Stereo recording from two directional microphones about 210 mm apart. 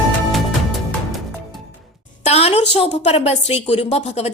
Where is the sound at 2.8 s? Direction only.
30° left (ahead or behind).